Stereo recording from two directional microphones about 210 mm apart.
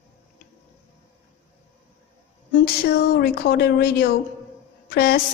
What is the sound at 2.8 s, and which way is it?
Speech, 50° left (ahead or behind).